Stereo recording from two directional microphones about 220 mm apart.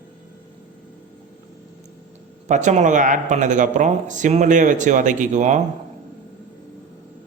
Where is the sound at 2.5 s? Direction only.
35° right (ahead or behind).